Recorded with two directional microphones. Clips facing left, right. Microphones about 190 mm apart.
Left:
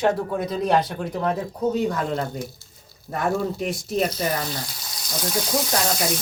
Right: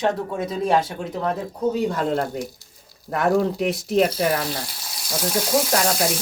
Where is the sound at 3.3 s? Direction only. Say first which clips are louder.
Right 5 dB; 80° right.